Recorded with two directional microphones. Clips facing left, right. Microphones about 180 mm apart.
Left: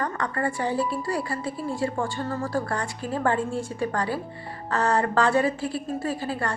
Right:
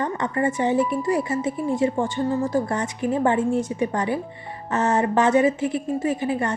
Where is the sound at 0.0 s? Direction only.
20° right (ahead or behind).